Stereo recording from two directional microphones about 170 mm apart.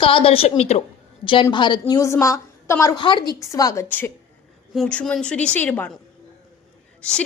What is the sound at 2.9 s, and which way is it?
A woman's voice, 30° left (ahead or behind).